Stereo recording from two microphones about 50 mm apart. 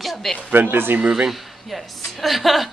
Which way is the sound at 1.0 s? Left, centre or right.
Centre.